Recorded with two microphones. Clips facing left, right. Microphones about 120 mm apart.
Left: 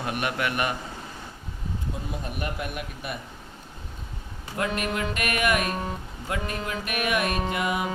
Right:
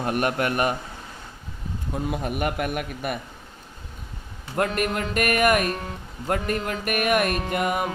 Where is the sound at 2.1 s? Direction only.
65° right (ahead or behind).